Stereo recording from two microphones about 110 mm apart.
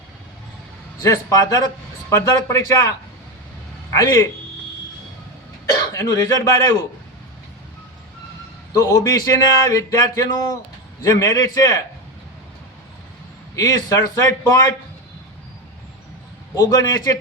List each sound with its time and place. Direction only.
1.0 s speech: 30° left (ahead or behind)
3.9 s speech: 35° left (ahead or behind)
5.9 s speech: 30° left (ahead or behind)
8.7 s speech: 35° left (ahead or behind)
13.6 s speech: 30° left (ahead or behind)
16.6 s speech: 30° left (ahead or behind)